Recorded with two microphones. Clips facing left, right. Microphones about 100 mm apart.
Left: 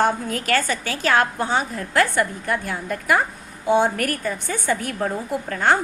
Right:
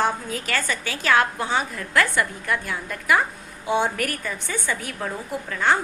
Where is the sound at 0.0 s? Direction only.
50° left (ahead or behind).